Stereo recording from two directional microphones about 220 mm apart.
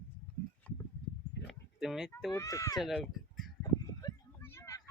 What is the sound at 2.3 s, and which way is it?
Speech, 15° left (ahead or behind).